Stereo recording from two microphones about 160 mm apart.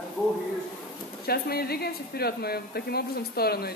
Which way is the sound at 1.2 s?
75° left (ahead or behind).